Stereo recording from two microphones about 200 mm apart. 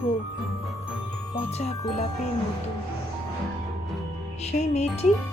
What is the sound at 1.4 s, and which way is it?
Speech, 30° left (ahead or behind).